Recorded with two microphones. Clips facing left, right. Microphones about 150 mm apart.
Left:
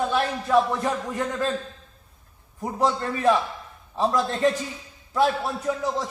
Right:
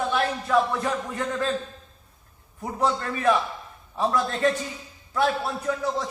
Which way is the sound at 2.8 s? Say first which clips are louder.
Left 1 dB; 25° left (ahead or behind).